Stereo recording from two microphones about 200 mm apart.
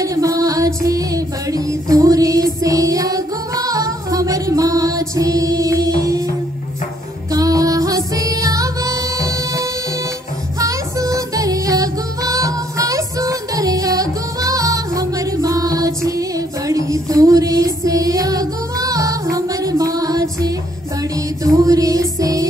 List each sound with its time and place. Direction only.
0.0 s music: 15° right (ahead or behind)
7.2 s music: 15° right (ahead or behind)